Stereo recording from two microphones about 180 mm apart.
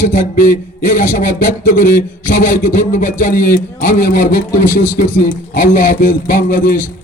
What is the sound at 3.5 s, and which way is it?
Speech, 50° left (ahead or behind).